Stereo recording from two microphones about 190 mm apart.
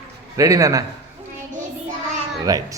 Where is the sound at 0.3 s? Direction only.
15° right (ahead or behind).